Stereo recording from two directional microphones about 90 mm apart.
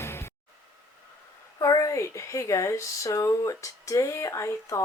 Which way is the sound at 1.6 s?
40° left (ahead or behind).